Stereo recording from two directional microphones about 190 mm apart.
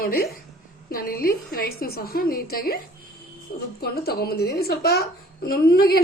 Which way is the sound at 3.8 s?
55° left (ahead or behind).